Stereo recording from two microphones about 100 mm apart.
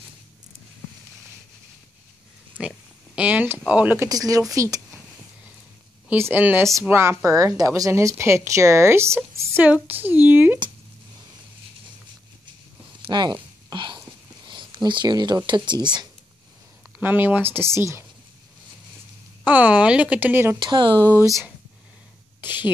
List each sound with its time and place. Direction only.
3.2 s speech: 15° right (ahead or behind)
4.1 s speech: 35° right (ahead or behind)
6.0 s speech: 20° right (ahead or behind)
9.8 s a sound: 20° right (ahead or behind)
13.0 s a sound: 50° right (ahead or behind)
14.5 s speech: 50° right (ahead or behind)
17.0 s speech: 20° right (ahead or behind)
19.4 s a sound: 15° right (ahead or behind)
20.5 s speech: 50° right (ahead or behind)
20.9 s speech: 20° left (ahead or behind)